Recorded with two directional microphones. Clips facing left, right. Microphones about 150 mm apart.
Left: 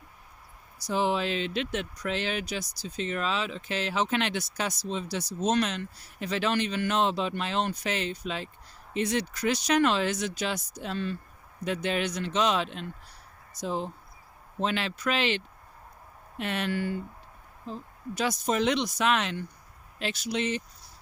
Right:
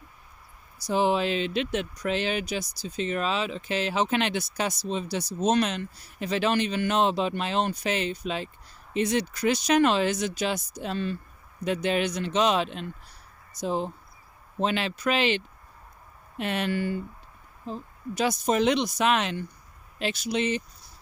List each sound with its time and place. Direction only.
0.9 s speech: 10° right (ahead or behind)
16.4 s speech: 10° right (ahead or behind)
18.5 s speech: 10° right (ahead or behind)